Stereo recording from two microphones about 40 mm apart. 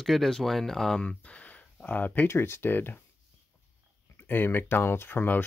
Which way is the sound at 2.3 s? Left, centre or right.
Left.